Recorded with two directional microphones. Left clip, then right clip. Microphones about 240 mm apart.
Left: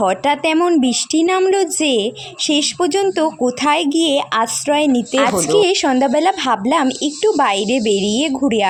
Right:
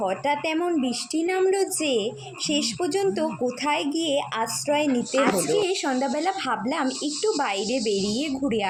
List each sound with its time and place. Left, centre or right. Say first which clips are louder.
0.0 s speech: left 9 dB; left